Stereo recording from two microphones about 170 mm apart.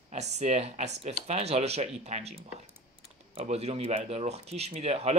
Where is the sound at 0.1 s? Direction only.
40° right (ahead or behind).